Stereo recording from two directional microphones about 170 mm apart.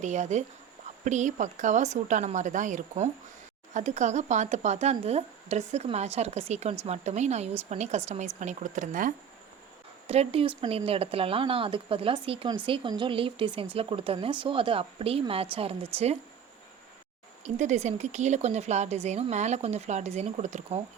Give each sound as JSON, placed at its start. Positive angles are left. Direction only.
{"t": 0.0, "sound": "a woman's voice", "side_deg": -45}
{"t": 10.1, "sound": "speech", "side_deg": -35}
{"t": 17.4, "sound": "speech", "side_deg": -45}